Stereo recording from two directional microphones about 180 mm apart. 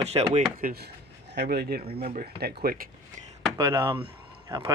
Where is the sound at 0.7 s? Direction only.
65° right (ahead or behind).